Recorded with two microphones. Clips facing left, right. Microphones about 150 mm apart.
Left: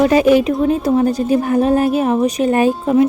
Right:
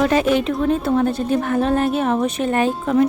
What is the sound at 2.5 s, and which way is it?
Speech, 15° left (ahead or behind).